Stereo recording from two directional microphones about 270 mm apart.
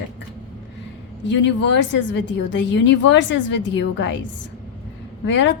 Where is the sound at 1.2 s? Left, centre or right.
Left.